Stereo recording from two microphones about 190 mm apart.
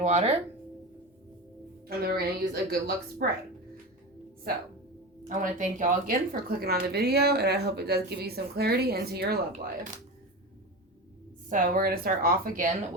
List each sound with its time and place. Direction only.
0.0 s speech: 35° right (ahead or behind)
2.0 s speech: 55° right (ahead or behind)
5.4 s speech: 45° right (ahead or behind)
11.4 s a woman's voice: 45° right (ahead or behind)